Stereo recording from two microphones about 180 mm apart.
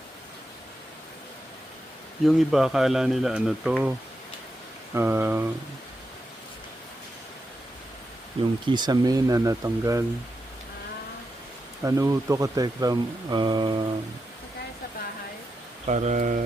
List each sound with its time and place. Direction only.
2.2 s speech: centre (ahead or behind)
4.9 s speech: 15° right (ahead or behind)
8.4 s speech: 30° right (ahead or behind)
11.8 s speech: 15° right (ahead or behind)
15.9 s speech: 40° right (ahead or behind)